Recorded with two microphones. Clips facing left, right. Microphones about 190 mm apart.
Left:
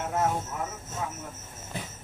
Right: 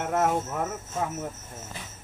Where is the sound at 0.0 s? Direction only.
65° right (ahead or behind).